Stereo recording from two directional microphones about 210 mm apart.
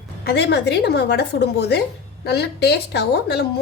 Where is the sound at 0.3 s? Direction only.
55° left (ahead or behind).